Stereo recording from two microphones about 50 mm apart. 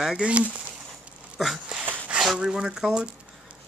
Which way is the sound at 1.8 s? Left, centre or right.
Right.